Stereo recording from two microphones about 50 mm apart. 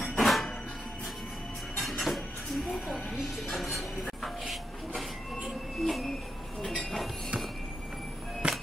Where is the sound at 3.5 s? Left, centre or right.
Centre.